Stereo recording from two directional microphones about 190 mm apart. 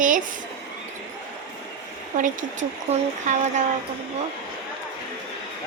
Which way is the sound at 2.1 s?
40° right (ahead or behind).